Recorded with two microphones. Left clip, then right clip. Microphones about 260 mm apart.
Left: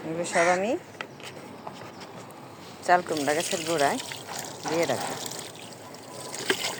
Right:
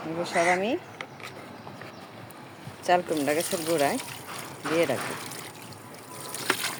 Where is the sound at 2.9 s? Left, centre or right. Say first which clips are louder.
Left 1 dB; centre.